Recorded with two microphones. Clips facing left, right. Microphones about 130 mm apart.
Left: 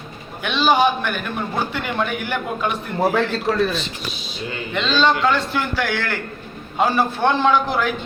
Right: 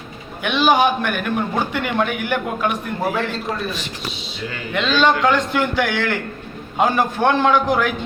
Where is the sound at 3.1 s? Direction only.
75° left (ahead or behind).